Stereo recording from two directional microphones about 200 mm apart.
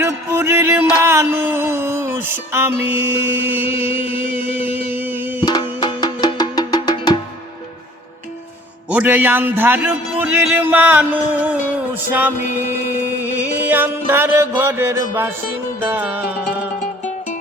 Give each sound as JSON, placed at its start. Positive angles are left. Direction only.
{"t": 0.0, "sound": "music", "side_deg": -15}
{"t": 3.0, "sound": "speech", "side_deg": -10}
{"t": 3.8, "sound": "music", "side_deg": -10}
{"t": 5.8, "sound": "music", "side_deg": 20}
{"t": 8.9, "sound": "speech", "side_deg": -10}